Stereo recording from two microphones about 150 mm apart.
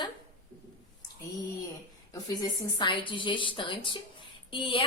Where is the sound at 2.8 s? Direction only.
35° left (ahead or behind).